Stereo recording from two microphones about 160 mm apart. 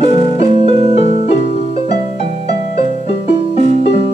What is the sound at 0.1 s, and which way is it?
Music, 30° right (ahead or behind).